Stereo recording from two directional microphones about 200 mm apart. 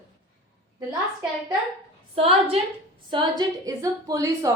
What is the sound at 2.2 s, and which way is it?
A woman's voice, 30° right (ahead or behind).